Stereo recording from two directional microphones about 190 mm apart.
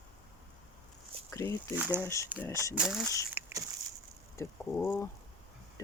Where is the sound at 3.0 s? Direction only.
15° left (ahead or behind).